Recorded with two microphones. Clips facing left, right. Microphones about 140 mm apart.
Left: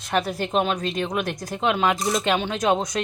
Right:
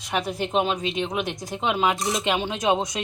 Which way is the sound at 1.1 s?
20° right (ahead or behind).